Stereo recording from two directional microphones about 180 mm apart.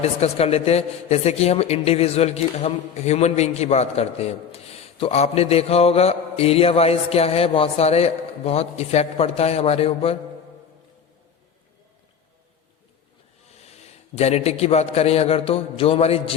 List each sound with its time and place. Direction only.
0.0 s a woman's voice: 35° left (ahead or behind)
13.6 s a man's voice: 35° left (ahead or behind)